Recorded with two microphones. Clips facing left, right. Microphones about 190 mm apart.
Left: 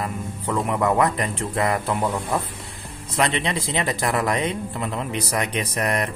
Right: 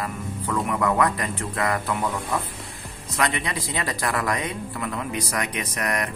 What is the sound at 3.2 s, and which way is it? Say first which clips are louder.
A man's voice: left 3 dB; 25° left (ahead or behind).